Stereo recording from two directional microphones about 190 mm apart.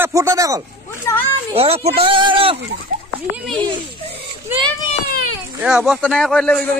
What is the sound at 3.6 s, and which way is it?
Speech, 30° right (ahead or behind).